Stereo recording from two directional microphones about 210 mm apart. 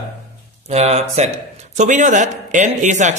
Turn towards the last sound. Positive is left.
turn(degrees=-35)  # may be behind; listen again after turning